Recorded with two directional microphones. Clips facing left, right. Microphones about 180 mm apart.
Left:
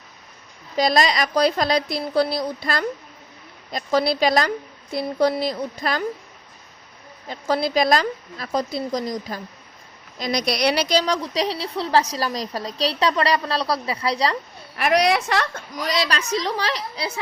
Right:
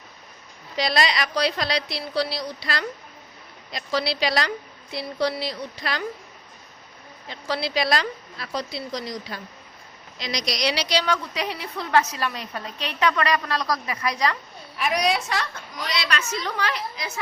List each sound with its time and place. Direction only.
0.8 s a woman's voice: 45° left (ahead or behind)
7.3 s a woman's voice: 45° left (ahead or behind); by 14.3 s 30° left (ahead or behind)
14.8 s a woman's voice: 70° left (ahead or behind)
15.9 s a woman's voice: 40° left (ahead or behind)